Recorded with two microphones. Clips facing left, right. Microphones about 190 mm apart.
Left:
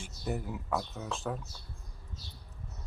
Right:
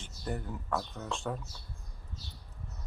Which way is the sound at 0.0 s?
5° left (ahead or behind).